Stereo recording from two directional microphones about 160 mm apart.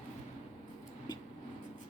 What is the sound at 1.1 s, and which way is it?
Writing, 25° left (ahead or behind).